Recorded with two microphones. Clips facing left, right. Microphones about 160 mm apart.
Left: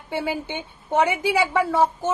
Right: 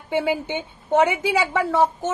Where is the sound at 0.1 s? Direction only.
20° right (ahead or behind).